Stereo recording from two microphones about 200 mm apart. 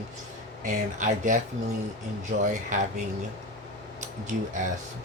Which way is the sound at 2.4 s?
40° right (ahead or behind).